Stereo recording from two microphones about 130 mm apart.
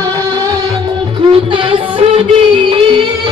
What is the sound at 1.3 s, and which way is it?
Music, 40° right (ahead or behind).